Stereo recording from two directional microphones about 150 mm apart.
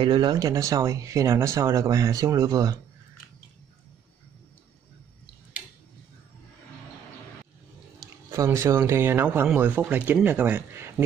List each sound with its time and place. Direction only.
0.0 s speech: 30° right (ahead or behind)
8.3 s speech: 20° right (ahead or behind)